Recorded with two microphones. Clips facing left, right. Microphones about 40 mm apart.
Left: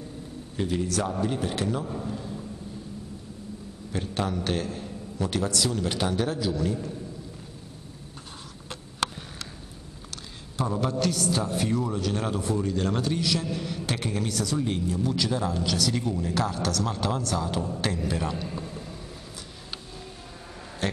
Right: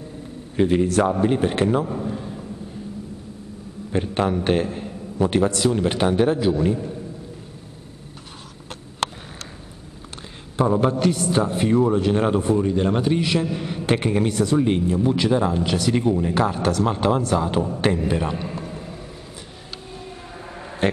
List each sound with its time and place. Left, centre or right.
0.6 s speech: right
1.9 s a man's voice: right
3.9 s a man's voice: right
10.6 s a man's voice: right
20.8 s a sound: right